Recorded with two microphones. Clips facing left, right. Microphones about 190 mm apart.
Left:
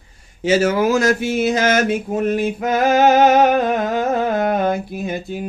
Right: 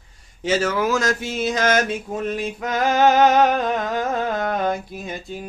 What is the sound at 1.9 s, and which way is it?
Music, 60° left (ahead or behind).